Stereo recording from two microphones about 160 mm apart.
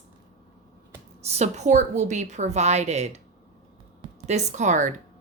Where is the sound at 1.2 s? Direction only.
40° right (ahead or behind).